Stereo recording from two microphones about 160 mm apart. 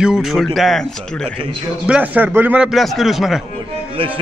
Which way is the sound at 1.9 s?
10° right (ahead or behind).